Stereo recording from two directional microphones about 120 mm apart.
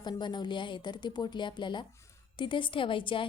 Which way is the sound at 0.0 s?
40° left (ahead or behind).